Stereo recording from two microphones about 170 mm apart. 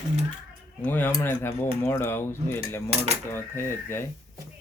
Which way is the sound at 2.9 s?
35° right (ahead or behind).